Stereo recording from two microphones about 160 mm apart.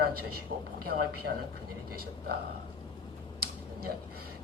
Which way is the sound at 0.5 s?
65° right (ahead or behind).